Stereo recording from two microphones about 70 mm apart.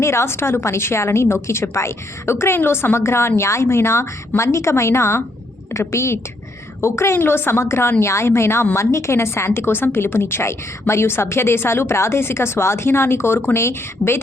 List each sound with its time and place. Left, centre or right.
0.0 s a woman's voice: left